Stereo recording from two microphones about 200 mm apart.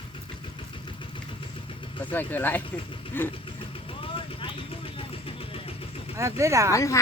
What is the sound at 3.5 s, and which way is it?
Vehicle, 25° left (ahead or behind).